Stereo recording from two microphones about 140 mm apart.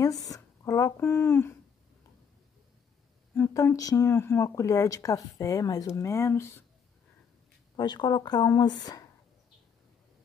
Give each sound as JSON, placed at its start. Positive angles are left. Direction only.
{"t": 0.0, "sound": "speech", "side_deg": 25}
{"t": 3.3, "sound": "speech", "side_deg": 20}
{"t": 7.7, "sound": "speech", "side_deg": 30}